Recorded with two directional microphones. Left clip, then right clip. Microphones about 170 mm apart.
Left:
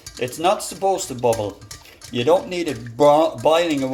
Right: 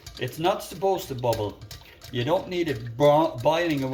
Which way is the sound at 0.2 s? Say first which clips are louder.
Left 6 dB; 40° left (ahead or behind).